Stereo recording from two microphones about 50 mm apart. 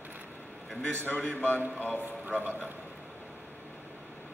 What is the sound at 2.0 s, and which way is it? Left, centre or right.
Speech, right.